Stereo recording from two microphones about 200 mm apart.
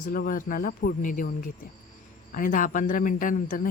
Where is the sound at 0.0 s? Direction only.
45° left (ahead or behind).